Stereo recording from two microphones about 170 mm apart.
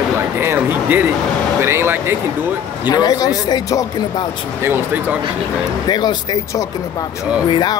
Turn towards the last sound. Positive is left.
turn(degrees=25)  # may be behind; listen again after turning